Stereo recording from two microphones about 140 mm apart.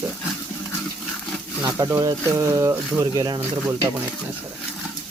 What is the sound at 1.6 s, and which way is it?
Speech, 25° right (ahead or behind).